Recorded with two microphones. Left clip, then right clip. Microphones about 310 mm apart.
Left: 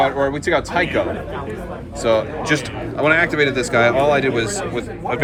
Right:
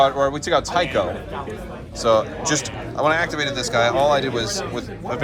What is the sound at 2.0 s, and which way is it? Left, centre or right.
Speech, centre.